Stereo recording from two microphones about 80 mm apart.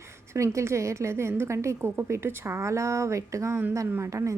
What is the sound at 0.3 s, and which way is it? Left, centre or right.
A woman's voice, right.